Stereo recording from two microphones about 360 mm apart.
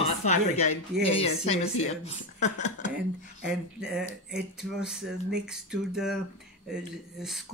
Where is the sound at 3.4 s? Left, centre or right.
Centre.